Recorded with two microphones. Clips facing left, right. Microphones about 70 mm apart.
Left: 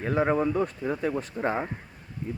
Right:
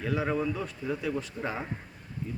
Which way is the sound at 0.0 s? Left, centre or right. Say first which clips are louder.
Left 5 dB; left.